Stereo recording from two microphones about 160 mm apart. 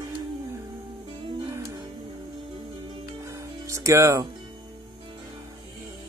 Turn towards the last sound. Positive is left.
turn(degrees=-20)  # may be behind; listen again after turning